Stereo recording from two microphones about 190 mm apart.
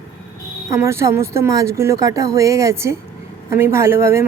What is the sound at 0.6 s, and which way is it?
Speech, 15° right (ahead or behind).